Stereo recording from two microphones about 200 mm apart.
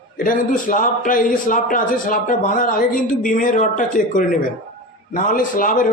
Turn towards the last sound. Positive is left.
turn(degrees=45)  # may be behind; listen again after turning